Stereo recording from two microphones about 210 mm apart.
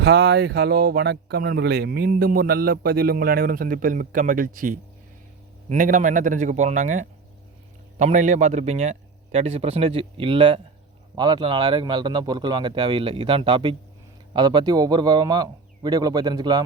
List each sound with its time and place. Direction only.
0.0 s a man's voice: 50° right (ahead or behind); by 16.6 s 20° right (ahead or behind)